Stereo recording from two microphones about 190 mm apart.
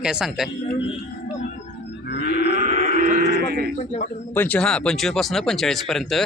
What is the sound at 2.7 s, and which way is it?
Music, 55° left (ahead or behind).